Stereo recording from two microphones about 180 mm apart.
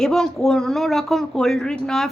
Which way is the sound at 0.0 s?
Centre (ahead or behind).